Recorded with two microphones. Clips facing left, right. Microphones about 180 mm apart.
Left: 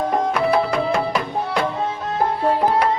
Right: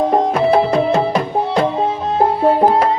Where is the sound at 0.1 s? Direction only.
25° right (ahead or behind).